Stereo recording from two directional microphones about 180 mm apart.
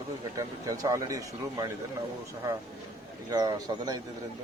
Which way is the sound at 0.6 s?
20° right (ahead or behind).